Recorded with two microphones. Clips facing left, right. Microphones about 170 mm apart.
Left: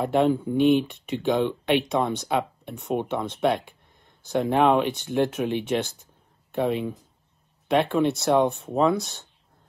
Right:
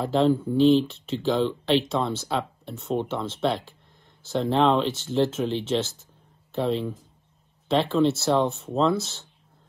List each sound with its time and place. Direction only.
0.0 s speech: 20° left (ahead or behind)